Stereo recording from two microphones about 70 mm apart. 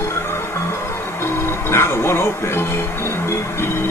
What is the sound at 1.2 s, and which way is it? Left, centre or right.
Speech, left.